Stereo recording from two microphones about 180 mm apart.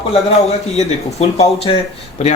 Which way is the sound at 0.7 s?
35° left (ahead or behind).